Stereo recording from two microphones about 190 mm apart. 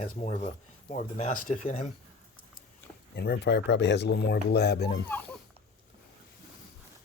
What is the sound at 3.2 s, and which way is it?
Speech, 60° left (ahead or behind).